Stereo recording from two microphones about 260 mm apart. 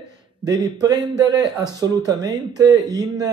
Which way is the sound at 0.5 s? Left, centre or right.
Centre.